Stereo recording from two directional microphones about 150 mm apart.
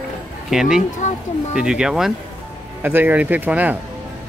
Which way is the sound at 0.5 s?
5° right (ahead or behind).